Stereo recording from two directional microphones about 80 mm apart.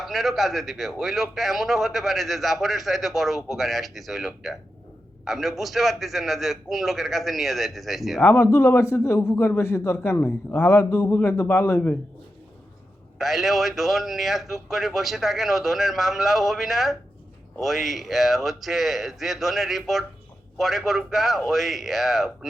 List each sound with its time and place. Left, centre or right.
0.0 s a man's voice: centre
8.2 s speech: left
8.4 s a man's voice: left
13.1 s a man's voice: centre